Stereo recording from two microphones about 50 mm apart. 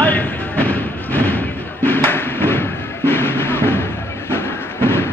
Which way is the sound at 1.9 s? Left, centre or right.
Left.